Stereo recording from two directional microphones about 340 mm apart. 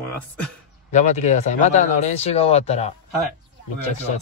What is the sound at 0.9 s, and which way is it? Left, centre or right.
Speech, centre.